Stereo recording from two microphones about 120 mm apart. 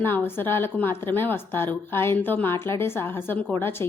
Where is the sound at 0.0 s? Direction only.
15° left (ahead or behind).